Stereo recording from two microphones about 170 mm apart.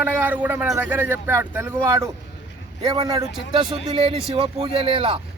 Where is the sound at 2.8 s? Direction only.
30° right (ahead or behind).